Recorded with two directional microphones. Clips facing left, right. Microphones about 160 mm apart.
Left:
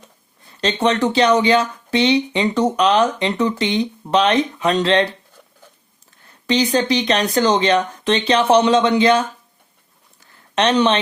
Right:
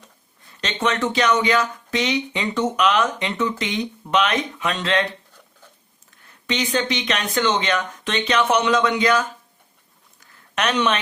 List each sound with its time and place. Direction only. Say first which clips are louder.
0.6 s speech: left 5 dB; 35° left (ahead or behind)
6.5 s speech: left 6 dB; 35° left (ahead or behind)
10.5 s speech: left 5 dB; 30° left (ahead or behind)